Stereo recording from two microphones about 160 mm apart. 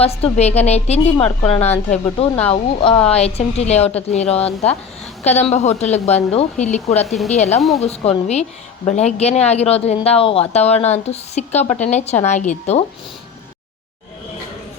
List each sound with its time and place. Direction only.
0.0 s speech: 40° left (ahead or behind)